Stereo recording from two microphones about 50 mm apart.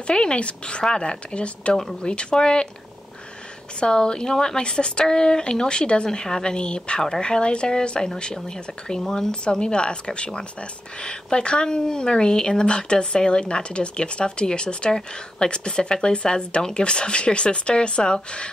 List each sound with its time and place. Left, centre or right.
0.0 s a woman's voice: centre
3.8 s a woman's voice: centre